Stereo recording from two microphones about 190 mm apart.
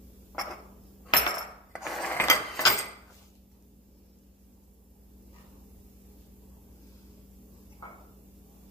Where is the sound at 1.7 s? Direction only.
Centre (ahead or behind).